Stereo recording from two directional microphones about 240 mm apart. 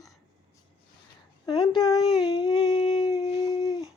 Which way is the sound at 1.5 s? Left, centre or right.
Centre.